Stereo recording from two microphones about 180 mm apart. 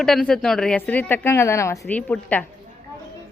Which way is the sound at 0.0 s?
Centre (ahead or behind).